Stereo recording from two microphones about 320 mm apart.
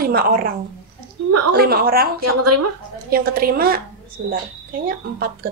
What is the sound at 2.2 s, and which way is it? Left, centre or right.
Speech, right.